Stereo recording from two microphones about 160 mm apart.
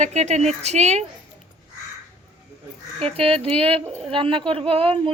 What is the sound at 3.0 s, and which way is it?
A woman's voice, 35° right (ahead or behind).